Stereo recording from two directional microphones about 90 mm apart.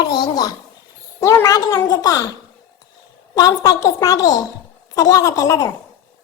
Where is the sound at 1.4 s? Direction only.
35° left (ahead or behind).